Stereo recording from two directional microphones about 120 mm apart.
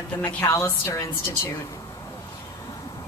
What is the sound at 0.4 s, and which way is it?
A woman's voice, 25° left (ahead or behind).